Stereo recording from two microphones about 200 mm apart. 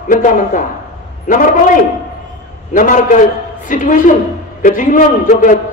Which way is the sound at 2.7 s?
40° left (ahead or behind).